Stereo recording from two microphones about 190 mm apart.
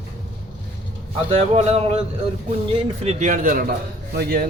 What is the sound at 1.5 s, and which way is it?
A man's voice, 35° right (ahead or behind).